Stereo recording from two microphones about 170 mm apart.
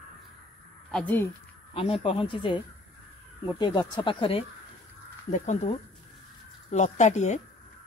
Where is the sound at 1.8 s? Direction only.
35° left (ahead or behind).